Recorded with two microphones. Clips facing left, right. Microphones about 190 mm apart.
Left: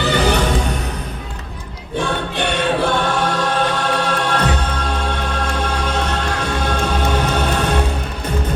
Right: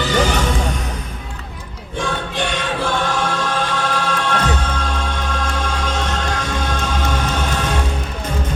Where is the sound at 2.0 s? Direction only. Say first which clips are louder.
Left 2 dB; 60° left (ahead or behind).